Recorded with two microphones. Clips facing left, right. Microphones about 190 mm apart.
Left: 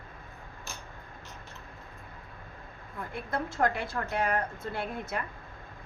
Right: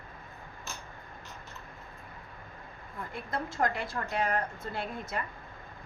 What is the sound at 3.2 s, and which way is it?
A woman's voice, 55° left (ahead or behind).